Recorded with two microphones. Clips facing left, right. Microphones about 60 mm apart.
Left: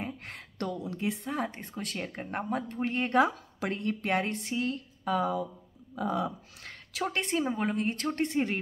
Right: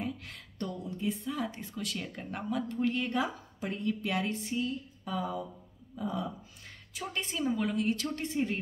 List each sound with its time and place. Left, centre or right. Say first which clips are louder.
0.6 s a woman's voice: left 3 dB; left
1.3 s speech: left 2 dB; left
7.3 s a woman's voice: even; left